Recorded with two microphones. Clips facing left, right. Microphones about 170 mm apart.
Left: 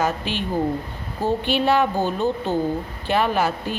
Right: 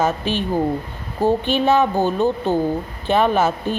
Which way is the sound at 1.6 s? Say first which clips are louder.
Right 3 dB; 20° right (ahead or behind).